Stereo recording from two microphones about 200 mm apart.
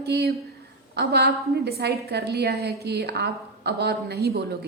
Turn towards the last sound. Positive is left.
turn(degrees=-50)  # may be behind; listen again after turning